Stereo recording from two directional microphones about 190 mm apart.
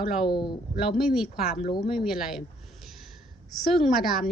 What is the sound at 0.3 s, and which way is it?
Speech, 25° left (ahead or behind).